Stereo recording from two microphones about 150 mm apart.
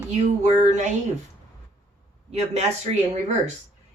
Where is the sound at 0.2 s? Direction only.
50° right (ahead or behind).